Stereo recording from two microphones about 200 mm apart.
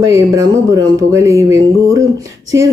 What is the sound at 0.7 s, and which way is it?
Speech, 15° right (ahead or behind).